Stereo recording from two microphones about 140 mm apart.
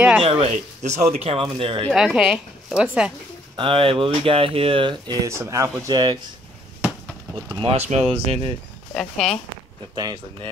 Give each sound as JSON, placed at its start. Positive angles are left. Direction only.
{"t": 0.2, "sound": "speech", "side_deg": -50}
{"t": 1.9, "sound": "speech", "side_deg": -5}
{"t": 3.5, "sound": "speech", "side_deg": -40}
{"t": 5.2, "sound": "speech", "side_deg": -20}
{"t": 7.5, "sound": "speech", "side_deg": -45}
{"t": 8.9, "sound": "speech", "side_deg": 5}
{"t": 9.9, "sound": "speech", "side_deg": -30}